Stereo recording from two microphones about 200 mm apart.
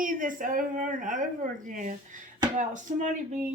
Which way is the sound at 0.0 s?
40° right (ahead or behind).